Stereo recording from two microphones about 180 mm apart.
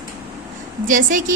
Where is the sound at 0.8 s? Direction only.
45° right (ahead or behind).